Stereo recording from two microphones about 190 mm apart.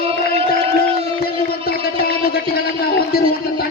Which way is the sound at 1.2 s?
55° left (ahead or behind).